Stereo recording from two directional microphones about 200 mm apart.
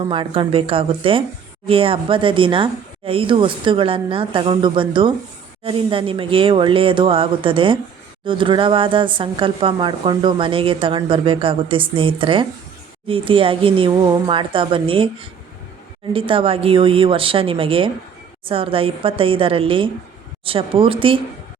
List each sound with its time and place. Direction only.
0.0 s speech: 25° right (ahead or behind)
16.1 s speech: 25° right (ahead or behind)